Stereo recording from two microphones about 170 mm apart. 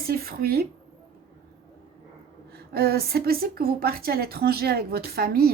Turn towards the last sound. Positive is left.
turn(degrees=-65)  # may be behind; listen again after turning